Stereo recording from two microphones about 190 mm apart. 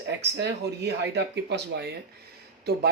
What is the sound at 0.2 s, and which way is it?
Speech, 60° right (ahead or behind).